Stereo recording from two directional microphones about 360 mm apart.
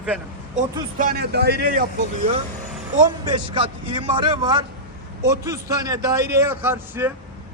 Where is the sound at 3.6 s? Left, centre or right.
Centre.